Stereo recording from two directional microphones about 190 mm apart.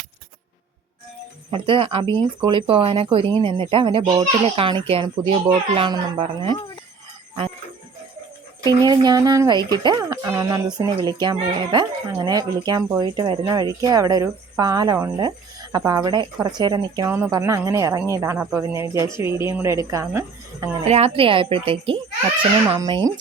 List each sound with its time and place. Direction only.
1.5 s speech: 30° right (ahead or behind)
8.6 s a woman's voice: 20° right (ahead or behind)
20.8 s a woman's voice: 30° right (ahead or behind)